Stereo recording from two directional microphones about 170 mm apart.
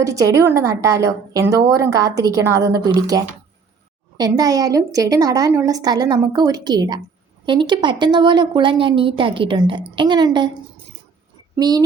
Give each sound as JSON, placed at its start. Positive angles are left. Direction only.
{"t": 0.0, "sound": "a woman's voice", "side_deg": -20}
{"t": 11.5, "sound": "speech", "side_deg": -25}